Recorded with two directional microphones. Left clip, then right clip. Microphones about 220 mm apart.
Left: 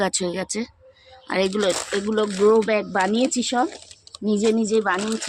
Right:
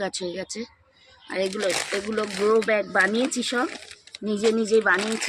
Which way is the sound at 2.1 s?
35° left (ahead or behind).